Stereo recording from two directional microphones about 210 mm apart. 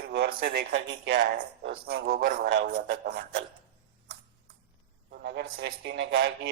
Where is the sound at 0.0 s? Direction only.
50° right (ahead or behind).